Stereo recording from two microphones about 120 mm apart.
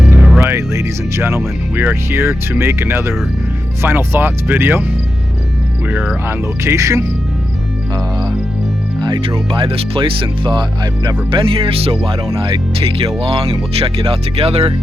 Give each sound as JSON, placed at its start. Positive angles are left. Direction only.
{"t": 0.3, "sound": "speech", "side_deg": -20}
{"t": 5.9, "sound": "speech", "side_deg": -5}
{"t": 6.2, "sound": "speech", "side_deg": -25}
{"t": 9.0, "sound": "speech", "side_deg": -40}